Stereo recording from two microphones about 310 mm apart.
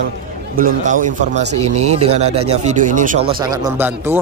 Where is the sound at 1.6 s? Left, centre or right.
Right.